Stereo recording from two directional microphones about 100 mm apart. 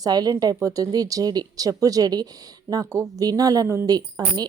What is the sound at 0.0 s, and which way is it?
A woman's voice, 40° right (ahead or behind).